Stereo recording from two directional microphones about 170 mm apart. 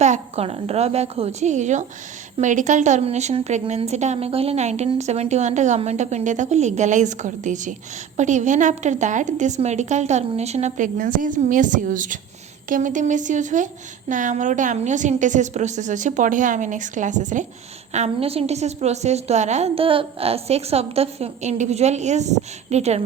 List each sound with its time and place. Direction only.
0.0 s a woman's voice: 40° right (ahead or behind)